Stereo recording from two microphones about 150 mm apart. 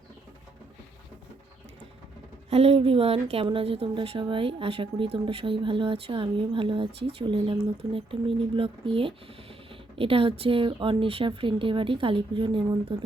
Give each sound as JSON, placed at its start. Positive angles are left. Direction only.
{"t": 2.5, "sound": "speech", "side_deg": -40}